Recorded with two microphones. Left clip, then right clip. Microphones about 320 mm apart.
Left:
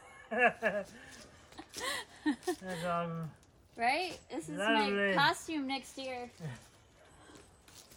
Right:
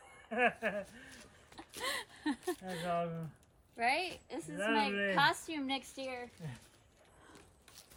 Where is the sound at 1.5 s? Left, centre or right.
Centre.